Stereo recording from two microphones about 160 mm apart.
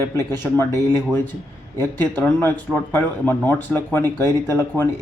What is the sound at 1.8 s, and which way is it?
Speech, 10° left (ahead or behind).